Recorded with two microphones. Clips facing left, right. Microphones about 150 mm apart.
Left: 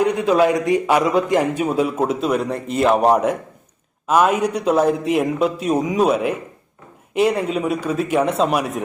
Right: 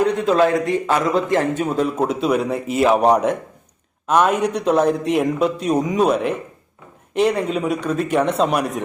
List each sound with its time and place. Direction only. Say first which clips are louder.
0.0 s a man's voice: even; 10° left (ahead or behind)